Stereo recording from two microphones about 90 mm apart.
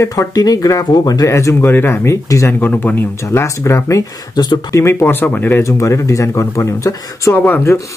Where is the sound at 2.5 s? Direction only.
20° left (ahead or behind).